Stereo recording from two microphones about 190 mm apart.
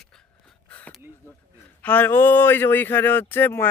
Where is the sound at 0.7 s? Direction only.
5° left (ahead or behind).